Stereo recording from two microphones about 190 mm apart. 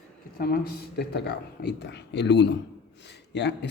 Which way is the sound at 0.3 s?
50° left (ahead or behind).